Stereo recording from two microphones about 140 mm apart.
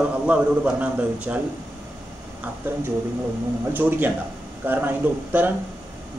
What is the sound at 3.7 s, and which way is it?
A man's voice, 10° right (ahead or behind).